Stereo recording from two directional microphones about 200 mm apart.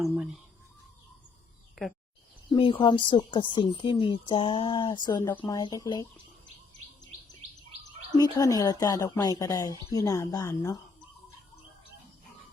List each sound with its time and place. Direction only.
0.0 s speech: 5° right (ahead or behind)
1.8 s speech: centre (ahead or behind)
2.6 s a woman's voice: 25° left (ahead or behind)
8.1 s a woman's voice: 20° left (ahead or behind)